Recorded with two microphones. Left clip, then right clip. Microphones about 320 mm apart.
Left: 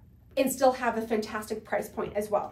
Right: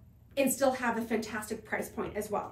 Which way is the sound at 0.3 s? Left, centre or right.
Centre.